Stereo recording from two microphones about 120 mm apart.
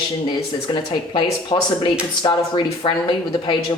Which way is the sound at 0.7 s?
40° left (ahead or behind).